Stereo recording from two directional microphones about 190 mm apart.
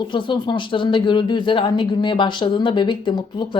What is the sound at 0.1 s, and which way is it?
Speech, 25° left (ahead or behind).